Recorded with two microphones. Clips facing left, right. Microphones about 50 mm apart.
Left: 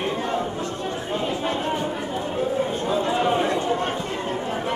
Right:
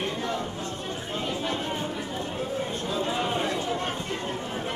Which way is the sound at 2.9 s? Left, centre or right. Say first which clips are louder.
Left 6 dB; centre.